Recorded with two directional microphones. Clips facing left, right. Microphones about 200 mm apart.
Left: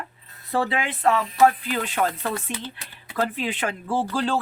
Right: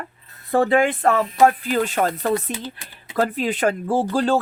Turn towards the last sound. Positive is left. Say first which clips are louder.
# right 5 dB
turn(degrees=-45)  # may be behind; listen again after turning